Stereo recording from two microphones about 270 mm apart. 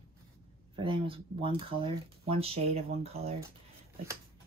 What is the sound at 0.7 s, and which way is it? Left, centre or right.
Speech, centre.